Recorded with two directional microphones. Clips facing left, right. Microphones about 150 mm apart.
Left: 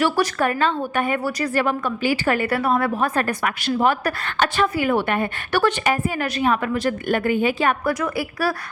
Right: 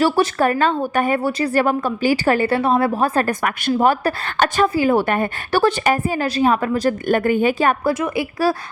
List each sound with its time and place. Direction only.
0.0 s a woman's voice: 30° right (ahead or behind)
0.6 s a woman's voice: 40° right (ahead or behind)
1.2 s a woman's voice: 30° right (ahead or behind)
4.0 s a woman's voice: 30° right (ahead or behind)
4.4 s a woman's voice: 45° right (ahead or behind)
4.7 s a woman's voice: 35° right (ahead or behind)
5.5 s a woman's voice: 30° right (ahead or behind)
7.9 s a woman's voice: 25° right (ahead or behind)